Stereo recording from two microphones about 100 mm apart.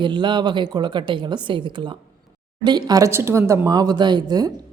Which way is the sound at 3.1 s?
25° right (ahead or behind).